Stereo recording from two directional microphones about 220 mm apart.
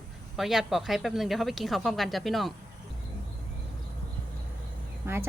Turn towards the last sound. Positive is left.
turn(degrees=-10)  # may be behind; listen again after turning